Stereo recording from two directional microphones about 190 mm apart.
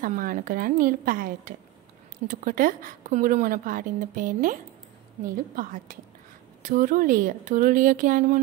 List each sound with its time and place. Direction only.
0.0 s a woman's voice: 45° right (ahead or behind)